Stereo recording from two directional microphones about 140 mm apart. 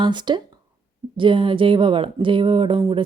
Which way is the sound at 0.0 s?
35° right (ahead or behind).